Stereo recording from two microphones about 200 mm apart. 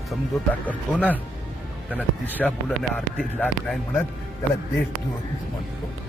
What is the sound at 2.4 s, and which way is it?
Speech, 5° left (ahead or behind).